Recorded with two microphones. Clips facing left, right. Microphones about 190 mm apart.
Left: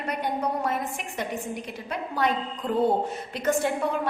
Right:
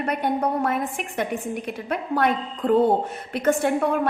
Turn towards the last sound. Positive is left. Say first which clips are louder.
# right 5 dB
turn(degrees=-55)  # may be behind; listen again after turning